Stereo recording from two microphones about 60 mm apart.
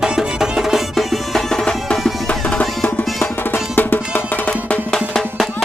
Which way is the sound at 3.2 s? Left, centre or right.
Left.